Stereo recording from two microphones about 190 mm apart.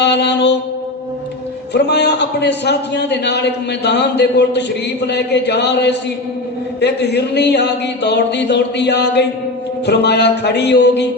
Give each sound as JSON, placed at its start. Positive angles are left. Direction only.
{"t": 0.0, "sound": "a man's voice", "side_deg": 65}
{"t": 1.7, "sound": "a man's voice", "side_deg": 65}